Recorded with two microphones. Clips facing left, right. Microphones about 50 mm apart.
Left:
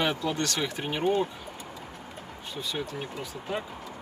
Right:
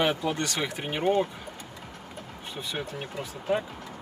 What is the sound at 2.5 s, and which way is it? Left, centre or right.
Speech, right.